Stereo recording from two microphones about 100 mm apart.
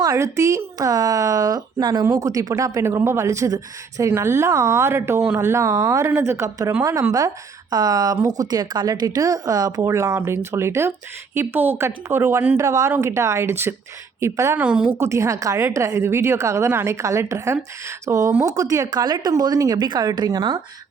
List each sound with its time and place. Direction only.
0.0 s a woman's voice: 30° right (ahead or behind)
9.8 s a woman's voice: 30° right (ahead or behind)
12.5 s a woman's voice: 30° right (ahead or behind)
14.6 s a woman's voice: 10° right (ahead or behind)
14.9 s a woman's voice: 30° right (ahead or behind)